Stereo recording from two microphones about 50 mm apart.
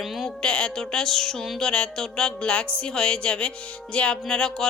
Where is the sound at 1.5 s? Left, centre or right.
Centre.